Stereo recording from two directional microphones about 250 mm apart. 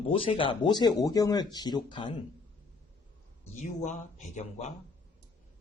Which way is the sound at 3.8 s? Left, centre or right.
Left.